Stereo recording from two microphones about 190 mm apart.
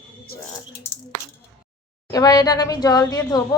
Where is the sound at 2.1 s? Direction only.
20° left (ahead or behind).